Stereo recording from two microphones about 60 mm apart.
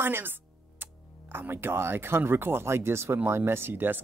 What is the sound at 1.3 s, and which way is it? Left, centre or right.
Speech, right.